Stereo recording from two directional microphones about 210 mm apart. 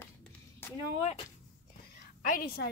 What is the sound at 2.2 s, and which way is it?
Speech, 40° left (ahead or behind).